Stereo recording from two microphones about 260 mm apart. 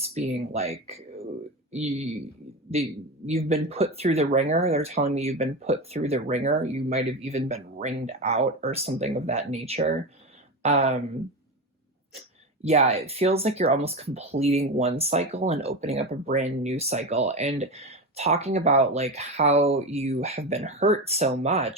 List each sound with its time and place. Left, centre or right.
0.0 s speech: right
3.2 s speech: right
12.6 s speech: right